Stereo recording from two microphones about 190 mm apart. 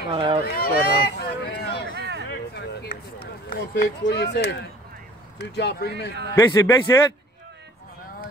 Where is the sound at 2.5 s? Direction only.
60° left (ahead or behind).